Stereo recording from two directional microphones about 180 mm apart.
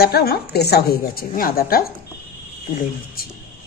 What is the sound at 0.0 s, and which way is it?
Speech, 60° left (ahead or behind).